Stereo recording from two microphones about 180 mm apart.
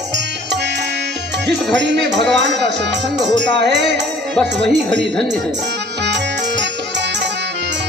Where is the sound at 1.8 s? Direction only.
75° right (ahead or behind).